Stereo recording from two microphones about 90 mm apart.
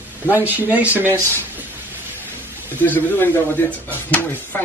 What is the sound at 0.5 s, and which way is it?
Speech, 20° right (ahead or behind).